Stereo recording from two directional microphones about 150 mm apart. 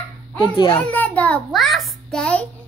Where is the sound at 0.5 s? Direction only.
35° left (ahead or behind).